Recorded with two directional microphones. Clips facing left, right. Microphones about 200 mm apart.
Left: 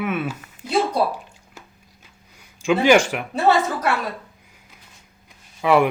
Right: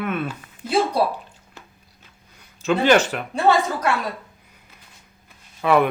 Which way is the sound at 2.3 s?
10° left (ahead or behind).